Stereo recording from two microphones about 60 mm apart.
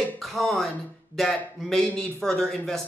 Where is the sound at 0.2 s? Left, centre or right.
Centre.